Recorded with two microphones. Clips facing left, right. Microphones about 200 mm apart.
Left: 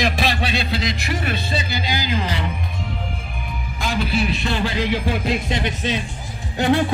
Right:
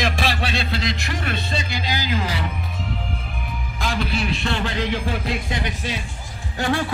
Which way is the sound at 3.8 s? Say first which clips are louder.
Left 3 dB; 5° left (ahead or behind).